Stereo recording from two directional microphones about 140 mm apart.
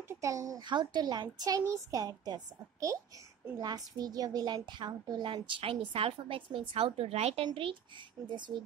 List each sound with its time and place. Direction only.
0.1 s a child's voice: 20° right (ahead or behind); by 7.4 s 50° right (ahead or behind)
7.4 s a woman's voice: 35° right (ahead or behind)